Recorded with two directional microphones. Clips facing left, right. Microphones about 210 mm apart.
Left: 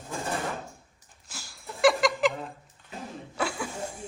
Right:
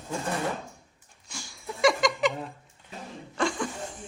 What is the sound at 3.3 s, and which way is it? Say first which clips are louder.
Chuckle: right 3 dB; 5° left (ahead or behind).